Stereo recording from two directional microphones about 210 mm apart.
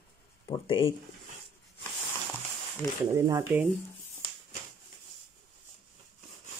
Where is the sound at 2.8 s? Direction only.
10° left (ahead or behind).